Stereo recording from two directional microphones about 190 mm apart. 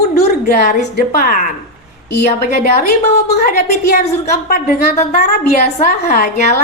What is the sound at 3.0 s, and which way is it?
Speech, 50° left (ahead or behind).